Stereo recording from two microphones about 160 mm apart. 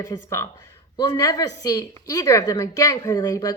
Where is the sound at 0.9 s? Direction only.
30° left (ahead or behind).